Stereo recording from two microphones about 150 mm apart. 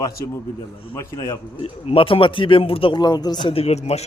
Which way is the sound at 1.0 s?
20° left (ahead or behind).